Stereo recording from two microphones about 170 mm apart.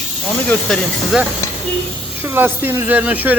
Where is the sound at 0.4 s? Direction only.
5° left (ahead or behind).